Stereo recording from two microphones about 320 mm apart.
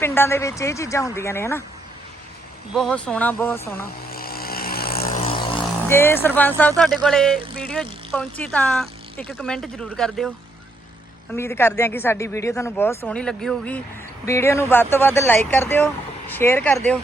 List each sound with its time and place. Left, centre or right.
0.0 s speech: centre
2.7 s speech: centre
4.1 s vehicle: left; by 6.5 s centre
6.6 s speech: centre
11.3 s speech: centre